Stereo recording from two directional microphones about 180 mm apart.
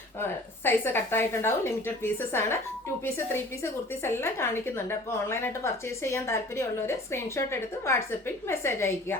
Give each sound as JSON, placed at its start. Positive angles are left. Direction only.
{"t": 0.2, "sound": "a woman's voice", "side_deg": 10}